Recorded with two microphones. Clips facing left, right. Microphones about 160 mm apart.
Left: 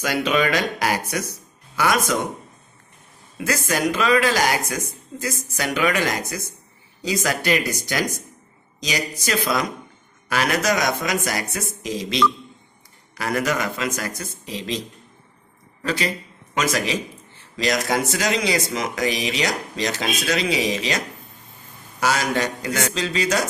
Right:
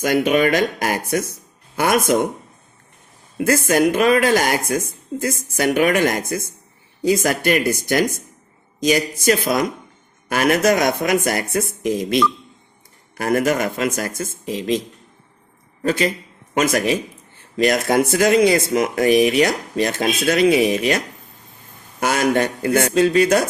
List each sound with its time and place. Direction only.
0.0 s speech: 50° right (ahead or behind)
3.3 s speech: 50° right (ahead or behind)
22.0 s speech: 55° right (ahead or behind)